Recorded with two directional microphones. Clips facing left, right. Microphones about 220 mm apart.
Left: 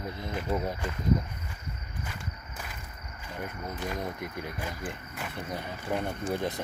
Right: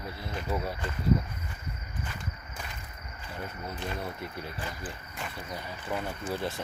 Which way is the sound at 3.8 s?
15° left (ahead or behind).